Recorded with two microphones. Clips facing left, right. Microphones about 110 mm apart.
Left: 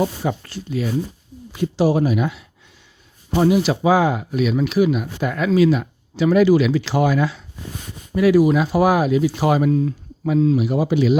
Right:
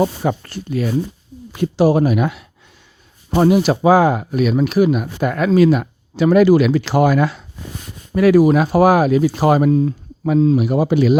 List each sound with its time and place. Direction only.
0.0 s speech: 55° right (ahead or behind); by 10.6 s 35° right (ahead or behind)
10.6 s speech: 50° right (ahead or behind)